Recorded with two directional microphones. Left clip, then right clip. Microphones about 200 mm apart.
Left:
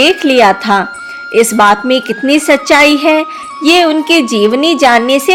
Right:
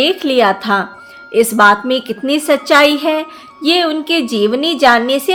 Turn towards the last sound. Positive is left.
turn(degrees=15)  # may be behind; listen again after turning